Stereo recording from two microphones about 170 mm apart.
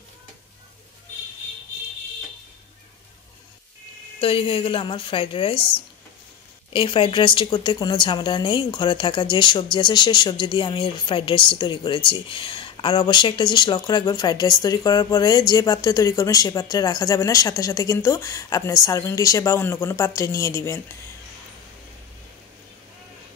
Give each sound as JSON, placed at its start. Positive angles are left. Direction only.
{"t": 4.2, "sound": "a woman's voice", "side_deg": 35}